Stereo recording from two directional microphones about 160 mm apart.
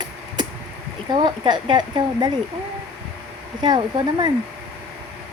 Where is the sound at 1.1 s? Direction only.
25° right (ahead or behind).